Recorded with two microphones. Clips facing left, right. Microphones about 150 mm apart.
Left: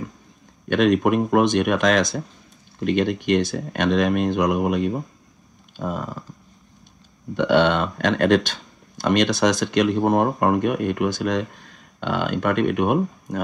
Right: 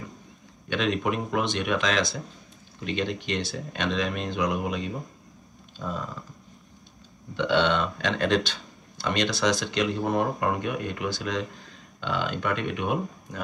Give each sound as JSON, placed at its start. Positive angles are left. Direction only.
{"t": 0.7, "sound": "speech", "side_deg": 55}
{"t": 7.3, "sound": "speech", "side_deg": 50}